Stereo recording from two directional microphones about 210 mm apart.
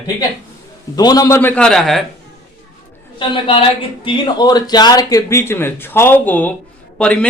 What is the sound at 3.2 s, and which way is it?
Speech, 25° left (ahead or behind).